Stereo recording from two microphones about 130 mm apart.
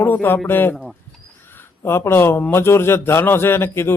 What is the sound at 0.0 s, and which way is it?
A man's voice, 15° left (ahead or behind).